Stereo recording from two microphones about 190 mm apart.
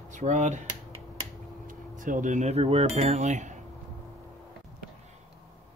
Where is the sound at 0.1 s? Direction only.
40° right (ahead or behind).